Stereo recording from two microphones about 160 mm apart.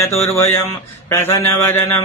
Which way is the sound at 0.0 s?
15° left (ahead or behind).